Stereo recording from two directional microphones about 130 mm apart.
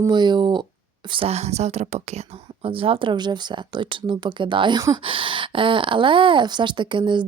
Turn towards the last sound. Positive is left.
turn(degrees=-40)  # may be behind; listen again after turning